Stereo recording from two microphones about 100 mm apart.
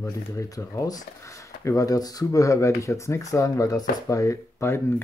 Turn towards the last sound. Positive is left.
turn(degrees=25)  # may be behind; listen again after turning